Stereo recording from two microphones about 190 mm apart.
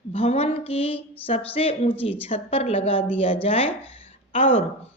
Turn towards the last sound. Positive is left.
turn(degrees=30)  # may be behind; listen again after turning